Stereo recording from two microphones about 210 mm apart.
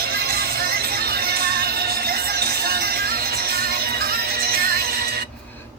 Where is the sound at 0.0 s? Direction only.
45° right (ahead or behind).